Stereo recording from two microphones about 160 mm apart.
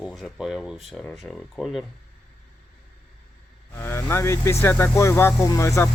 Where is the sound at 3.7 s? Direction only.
15° left (ahead or behind).